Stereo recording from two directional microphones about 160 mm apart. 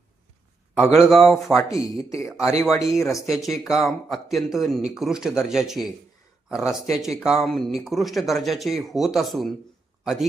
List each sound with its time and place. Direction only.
0.7 s speech: centre (ahead or behind)
1.7 s speech: 20° left (ahead or behind)
3.2 s speech: centre (ahead or behind)